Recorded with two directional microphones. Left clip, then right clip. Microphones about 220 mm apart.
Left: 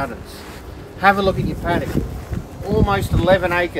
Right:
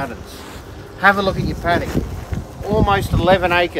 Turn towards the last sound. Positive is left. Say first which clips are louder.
# right 1 dB
turn(degrees=-30)  # may be behind; listen again after turning